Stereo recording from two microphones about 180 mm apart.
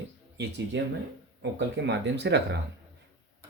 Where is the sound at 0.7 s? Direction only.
80° right.